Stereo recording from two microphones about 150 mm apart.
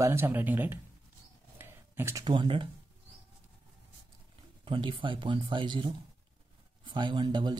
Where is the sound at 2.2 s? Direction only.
30° right (ahead or behind).